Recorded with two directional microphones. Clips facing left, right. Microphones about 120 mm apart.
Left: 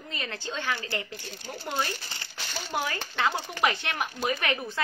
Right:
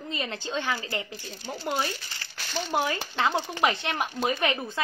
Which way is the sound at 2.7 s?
20° right (ahead or behind).